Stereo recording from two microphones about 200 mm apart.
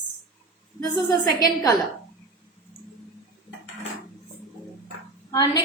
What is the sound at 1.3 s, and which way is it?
Speech, 20° left (ahead or behind).